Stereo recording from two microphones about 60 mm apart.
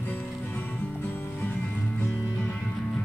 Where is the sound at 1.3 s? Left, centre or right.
Centre.